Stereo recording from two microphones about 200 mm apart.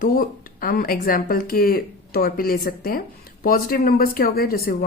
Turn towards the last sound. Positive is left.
turn(degrees=50)  # may be behind; listen again after turning